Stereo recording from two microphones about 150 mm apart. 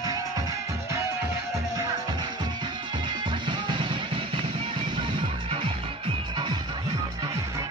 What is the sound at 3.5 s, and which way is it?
Music, 35° right (ahead or behind).